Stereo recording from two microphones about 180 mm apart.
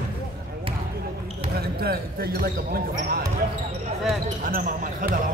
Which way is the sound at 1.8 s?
55° right (ahead or behind).